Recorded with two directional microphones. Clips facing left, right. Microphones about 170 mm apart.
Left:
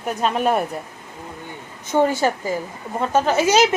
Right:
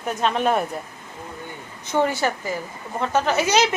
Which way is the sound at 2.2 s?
10° left (ahead or behind).